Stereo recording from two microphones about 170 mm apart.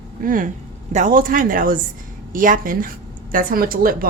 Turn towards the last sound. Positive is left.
turn(degrees=-55)  # may be behind; listen again after turning